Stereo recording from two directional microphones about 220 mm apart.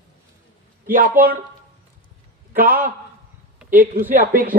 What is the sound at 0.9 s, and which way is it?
Speech, 40° right (ahead or behind).